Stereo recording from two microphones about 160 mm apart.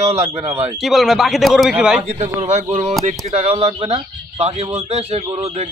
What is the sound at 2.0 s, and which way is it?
A man's voice, 45° right (ahead or behind).